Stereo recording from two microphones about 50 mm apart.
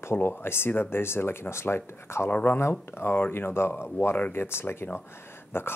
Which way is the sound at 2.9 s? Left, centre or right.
Left.